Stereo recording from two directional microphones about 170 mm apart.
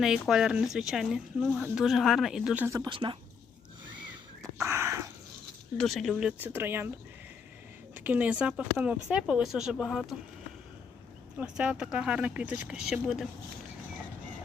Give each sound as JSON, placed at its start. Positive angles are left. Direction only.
{"t": 0.0, "sound": "speech", "side_deg": 0}
{"t": 2.6, "sound": "speech", "side_deg": -20}
{"t": 4.4, "sound": "a sound", "side_deg": -20}
{"t": 5.7, "sound": "speech", "side_deg": 0}
{"t": 7.9, "sound": "speech", "side_deg": -10}
{"t": 11.3, "sound": "speech", "side_deg": -5}